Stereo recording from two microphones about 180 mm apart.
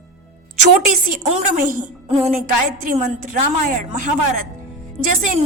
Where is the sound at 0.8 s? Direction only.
45° right (ahead or behind).